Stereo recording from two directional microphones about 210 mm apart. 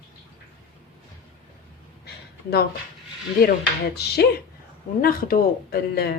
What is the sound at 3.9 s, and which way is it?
Speech, 50° left (ahead or behind).